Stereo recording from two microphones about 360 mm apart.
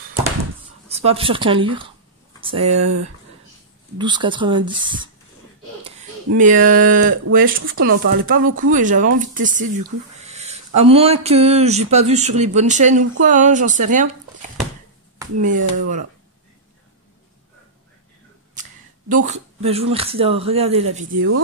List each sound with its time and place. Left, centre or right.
0.8 s speech: centre
4.0 s speech: centre
15.4 s speech: right
18.5 s speech: right
21.1 s speech: right